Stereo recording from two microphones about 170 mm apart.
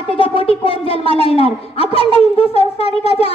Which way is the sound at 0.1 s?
30° left (ahead or behind).